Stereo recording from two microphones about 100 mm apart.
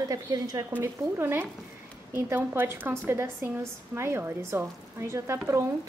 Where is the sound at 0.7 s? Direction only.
20° right (ahead or behind).